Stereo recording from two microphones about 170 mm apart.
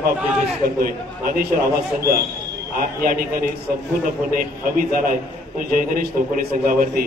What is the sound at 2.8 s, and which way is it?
A man's voice, 60° right (ahead or behind).